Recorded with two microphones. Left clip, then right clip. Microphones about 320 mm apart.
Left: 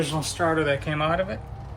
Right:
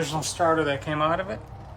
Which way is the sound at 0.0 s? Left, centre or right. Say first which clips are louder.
Right 1 dB; centre.